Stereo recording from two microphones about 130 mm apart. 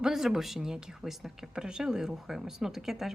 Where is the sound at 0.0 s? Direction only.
5° right (ahead or behind).